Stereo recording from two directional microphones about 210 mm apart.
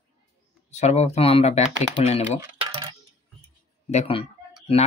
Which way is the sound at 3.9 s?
30° left (ahead or behind).